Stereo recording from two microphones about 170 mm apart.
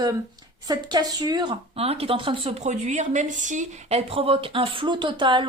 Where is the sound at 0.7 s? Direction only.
25° right (ahead or behind).